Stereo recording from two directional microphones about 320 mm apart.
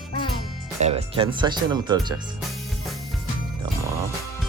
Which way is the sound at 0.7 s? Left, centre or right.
Centre.